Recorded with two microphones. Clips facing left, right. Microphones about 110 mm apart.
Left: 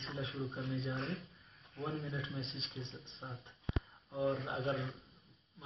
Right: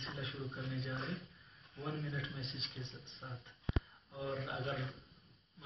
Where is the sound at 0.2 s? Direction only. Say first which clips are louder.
Left 5 dB; 25° left (ahead or behind).